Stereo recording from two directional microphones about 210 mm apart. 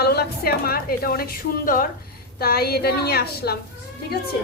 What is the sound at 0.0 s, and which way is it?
A woman's voice, 50° left (ahead or behind).